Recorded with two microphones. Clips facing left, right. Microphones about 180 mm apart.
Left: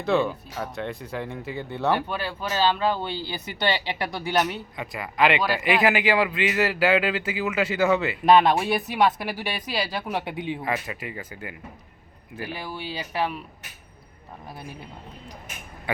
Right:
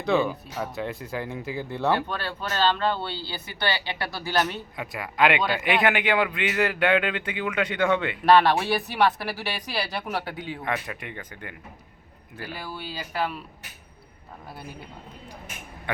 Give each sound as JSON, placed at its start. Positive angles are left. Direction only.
{"t": 0.0, "sound": "speech", "side_deg": 0}
{"t": 4.8, "sound": "speech", "side_deg": 0}
{"t": 10.6, "sound": "speech", "side_deg": 5}